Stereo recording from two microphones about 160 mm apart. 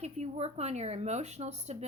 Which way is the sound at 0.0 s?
40° right (ahead or behind).